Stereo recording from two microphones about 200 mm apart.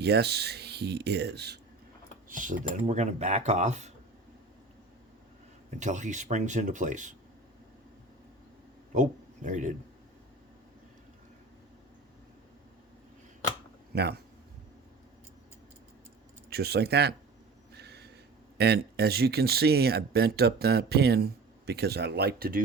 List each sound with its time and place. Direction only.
0.0 s speech: 55° right (ahead or behind)
2.3 s speech: 40° right (ahead or behind)
5.8 s speech: 35° right (ahead or behind)
8.9 s a man's voice: 40° right (ahead or behind)
13.9 s speech: 55° right (ahead or behind)
16.5 s speech: 50° right (ahead or behind)
17.7 s a sound: 55° right (ahead or behind)
18.5 s speech: 55° right (ahead or behind)